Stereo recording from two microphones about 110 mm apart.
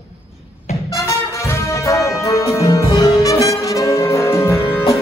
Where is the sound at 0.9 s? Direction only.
25° left (ahead or behind).